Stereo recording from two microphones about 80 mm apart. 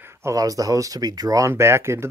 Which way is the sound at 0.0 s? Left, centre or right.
Right.